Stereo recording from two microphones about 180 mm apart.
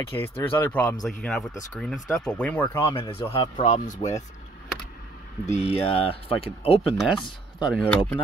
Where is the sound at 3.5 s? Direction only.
45° left (ahead or behind).